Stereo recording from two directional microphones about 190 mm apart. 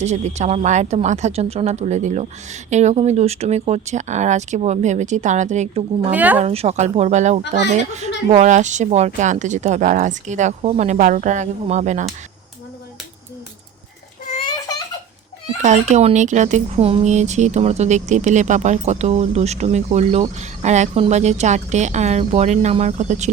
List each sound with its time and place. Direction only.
0.0 s speech: 35° right (ahead or behind)
6.1 s a woman's voice: 10° right (ahead or behind)
6.4 s speech: 35° right (ahead or behind)
14.3 s a sound: 20° left (ahead or behind)
15.6 s speech: 40° right (ahead or behind)